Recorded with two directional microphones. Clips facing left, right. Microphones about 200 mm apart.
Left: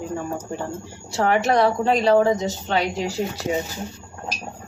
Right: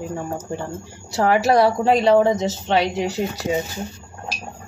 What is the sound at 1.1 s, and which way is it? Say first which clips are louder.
Speech: right 2 dB; 5° right (ahead or behind).